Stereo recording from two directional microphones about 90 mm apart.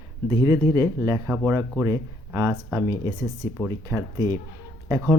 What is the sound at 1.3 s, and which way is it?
Speech, 30° right (ahead or behind).